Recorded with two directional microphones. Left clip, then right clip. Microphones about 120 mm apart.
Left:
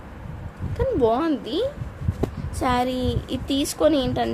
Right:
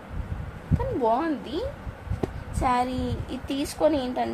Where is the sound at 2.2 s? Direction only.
80° left.